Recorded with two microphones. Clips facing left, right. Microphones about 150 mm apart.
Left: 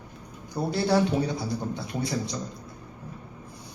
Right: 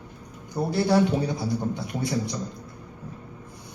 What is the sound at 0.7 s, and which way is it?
Speech, 20° right (ahead or behind).